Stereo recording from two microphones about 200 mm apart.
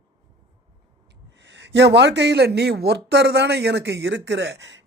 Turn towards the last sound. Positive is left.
turn(degrees=-60)  # may be behind; listen again after turning